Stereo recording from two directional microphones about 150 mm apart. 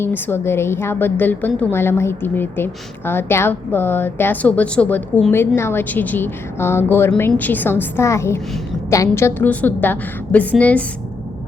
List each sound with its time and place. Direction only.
0.0 s a woman's voice: 15° left (ahead or behind)